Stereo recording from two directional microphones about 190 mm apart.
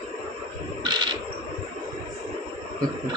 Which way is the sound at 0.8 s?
25° right (ahead or behind).